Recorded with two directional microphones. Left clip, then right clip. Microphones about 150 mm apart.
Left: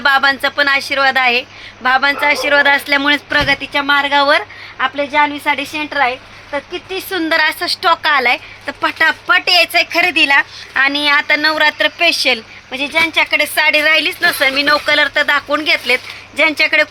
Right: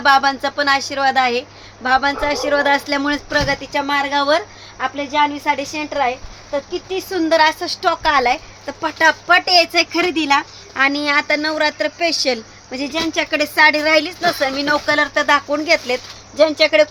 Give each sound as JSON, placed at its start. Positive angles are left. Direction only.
{"t": 0.0, "sound": "a woman's voice", "side_deg": 0}
{"t": 0.4, "sound": "a woman's voice", "side_deg": 10}
{"t": 2.7, "sound": "speech", "side_deg": -5}
{"t": 5.9, "sound": "speech", "side_deg": 30}
{"t": 6.9, "sound": "speech", "side_deg": -5}
{"t": 12.7, "sound": "speech", "side_deg": -25}
{"t": 13.6, "sound": "a woman's voice", "side_deg": -10}
{"t": 15.5, "sound": "speech", "side_deg": -20}